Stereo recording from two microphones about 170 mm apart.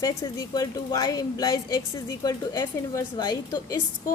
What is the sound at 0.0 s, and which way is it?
A woman's voice, 20° left (ahead or behind).